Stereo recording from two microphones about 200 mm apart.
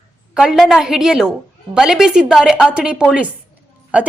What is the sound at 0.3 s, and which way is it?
A woman's voice, 5° right (ahead or behind).